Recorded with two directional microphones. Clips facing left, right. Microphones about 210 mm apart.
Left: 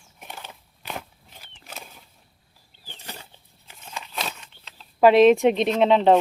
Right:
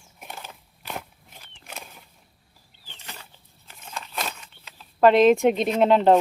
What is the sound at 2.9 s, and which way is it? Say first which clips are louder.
Bird flight: left 3 dB; 35° left (ahead or behind).